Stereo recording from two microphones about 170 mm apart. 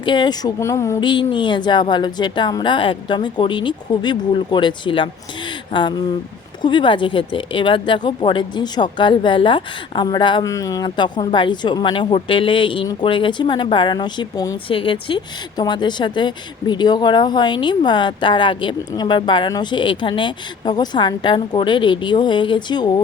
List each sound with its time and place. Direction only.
0.0 s a woman's voice: 25° left (ahead or behind)